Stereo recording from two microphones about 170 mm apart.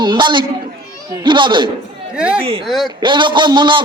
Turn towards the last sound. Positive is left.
turn(degrees=-25)  # may be behind; listen again after turning